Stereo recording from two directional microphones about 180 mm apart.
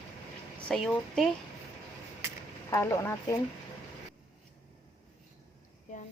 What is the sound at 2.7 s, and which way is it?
Speech, 15° left (ahead or behind).